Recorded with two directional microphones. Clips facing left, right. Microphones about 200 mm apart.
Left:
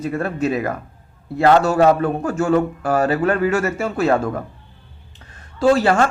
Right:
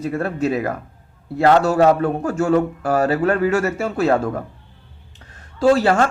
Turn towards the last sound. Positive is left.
turn(degrees=-35)  # may be behind; listen again after turning